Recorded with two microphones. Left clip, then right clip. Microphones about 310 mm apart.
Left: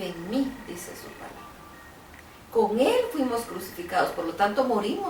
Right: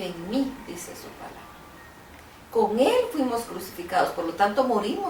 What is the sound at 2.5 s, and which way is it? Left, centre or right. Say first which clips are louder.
Speech: right 1 dB; centre.